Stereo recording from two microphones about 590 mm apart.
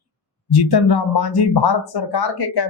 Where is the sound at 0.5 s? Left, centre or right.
Left.